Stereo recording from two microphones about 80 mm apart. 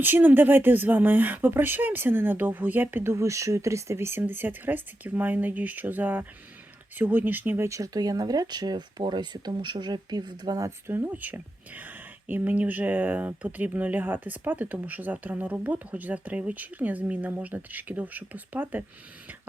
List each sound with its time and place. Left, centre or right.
0.0 s speech: right
7.7 s speech: right
10.6 s speech: right